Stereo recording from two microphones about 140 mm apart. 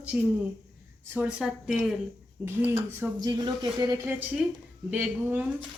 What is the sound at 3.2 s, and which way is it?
Speech, 30° right (ahead or behind).